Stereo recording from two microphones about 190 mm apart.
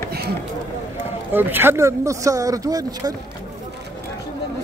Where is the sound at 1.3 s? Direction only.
10° right (ahead or behind).